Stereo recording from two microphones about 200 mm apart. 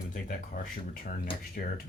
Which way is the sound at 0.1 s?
40° left (ahead or behind).